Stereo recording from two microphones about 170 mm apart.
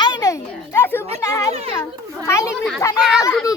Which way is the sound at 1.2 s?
20° left (ahead or behind).